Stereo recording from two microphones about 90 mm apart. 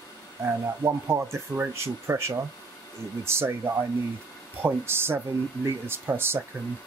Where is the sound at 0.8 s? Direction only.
35° right (ahead or behind).